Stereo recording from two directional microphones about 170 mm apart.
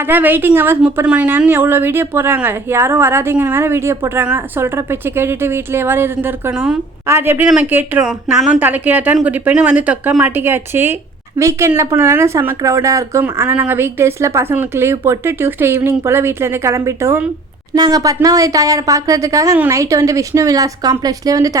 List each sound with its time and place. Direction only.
0.1 s a woman's voice: 10° right (ahead or behind)